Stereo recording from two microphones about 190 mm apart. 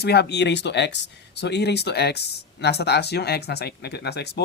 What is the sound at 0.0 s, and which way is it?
Speech, 60° left (ahead or behind).